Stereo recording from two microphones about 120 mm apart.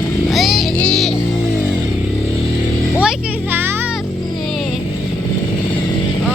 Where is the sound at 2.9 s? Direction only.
15° right (ahead or behind).